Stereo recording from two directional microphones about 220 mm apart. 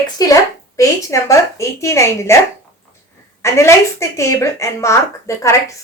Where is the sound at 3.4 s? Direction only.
10° left (ahead or behind).